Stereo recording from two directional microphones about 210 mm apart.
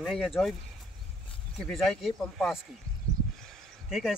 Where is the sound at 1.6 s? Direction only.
Centre (ahead or behind).